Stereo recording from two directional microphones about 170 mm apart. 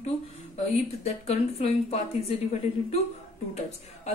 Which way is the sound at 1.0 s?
40° left (ahead or behind).